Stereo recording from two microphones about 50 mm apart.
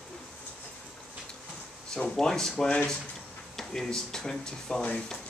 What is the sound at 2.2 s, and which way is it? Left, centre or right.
Speech, centre.